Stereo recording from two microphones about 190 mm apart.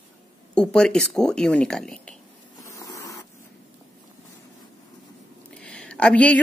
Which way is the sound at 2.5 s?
20° left (ahead or behind).